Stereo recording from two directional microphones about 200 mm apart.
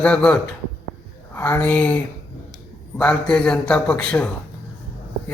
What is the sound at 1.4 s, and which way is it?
Speech, 10° left (ahead or behind).